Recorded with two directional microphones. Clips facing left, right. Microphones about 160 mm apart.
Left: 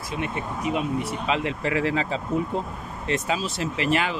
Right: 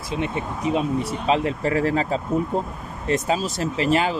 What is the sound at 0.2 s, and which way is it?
Speech, 30° right (ahead or behind).